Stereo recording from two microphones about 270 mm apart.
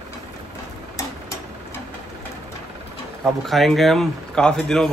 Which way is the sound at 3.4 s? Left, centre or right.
Centre.